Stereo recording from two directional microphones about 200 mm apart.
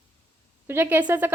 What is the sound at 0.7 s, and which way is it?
Speech, 10° right (ahead or behind).